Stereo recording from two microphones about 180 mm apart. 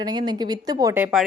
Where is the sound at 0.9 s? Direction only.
10° right (ahead or behind).